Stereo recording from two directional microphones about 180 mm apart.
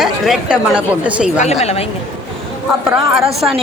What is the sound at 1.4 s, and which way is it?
Speech, 35° left (ahead or behind).